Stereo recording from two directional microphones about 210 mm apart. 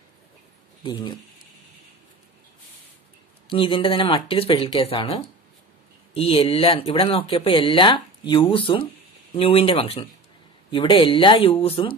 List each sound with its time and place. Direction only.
0.8 s speech: 20° left (ahead or behind)
3.4 s speech: 25° left (ahead or behind)